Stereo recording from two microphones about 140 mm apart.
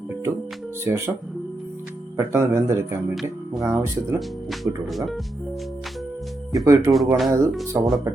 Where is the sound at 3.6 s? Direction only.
20° right (ahead or behind).